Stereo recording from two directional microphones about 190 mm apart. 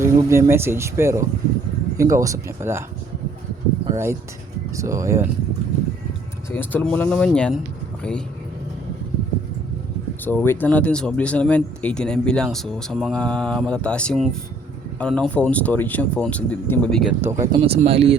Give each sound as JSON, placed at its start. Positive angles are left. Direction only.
{"t": 0.0, "sound": "speech", "side_deg": -15}
{"t": 3.9, "sound": "speech", "side_deg": -15}
{"t": 6.5, "sound": "speech", "side_deg": 10}
{"t": 10.2, "sound": "speech", "side_deg": 10}
{"t": 17.2, "sound": "speech", "side_deg": -15}
{"t": 17.6, "sound": "speech", "side_deg": -30}